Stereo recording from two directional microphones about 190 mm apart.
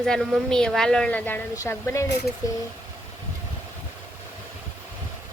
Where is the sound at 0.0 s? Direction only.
Centre (ahead or behind).